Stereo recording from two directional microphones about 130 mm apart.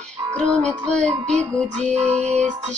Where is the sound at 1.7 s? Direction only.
60° right (ahead or behind).